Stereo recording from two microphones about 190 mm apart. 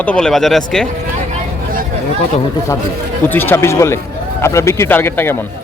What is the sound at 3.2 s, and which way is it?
Speech, 10° left (ahead or behind).